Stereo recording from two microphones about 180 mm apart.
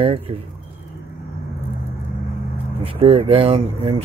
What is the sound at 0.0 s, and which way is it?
Speech, 30° right (ahead or behind).